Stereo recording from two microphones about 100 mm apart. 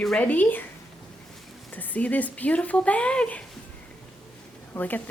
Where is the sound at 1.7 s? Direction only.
15° left (ahead or behind).